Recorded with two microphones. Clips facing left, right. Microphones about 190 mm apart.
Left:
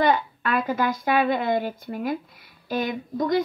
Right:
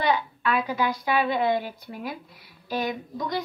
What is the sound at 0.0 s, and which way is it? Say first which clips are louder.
A woman's voice: left 3 dB; 50° left (ahead or behind).